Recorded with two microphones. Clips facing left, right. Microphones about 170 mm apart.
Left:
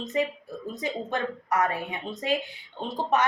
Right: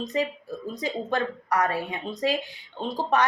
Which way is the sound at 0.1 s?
35° right (ahead or behind).